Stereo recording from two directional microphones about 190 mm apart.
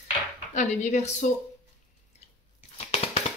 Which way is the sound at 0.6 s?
40° left (ahead or behind).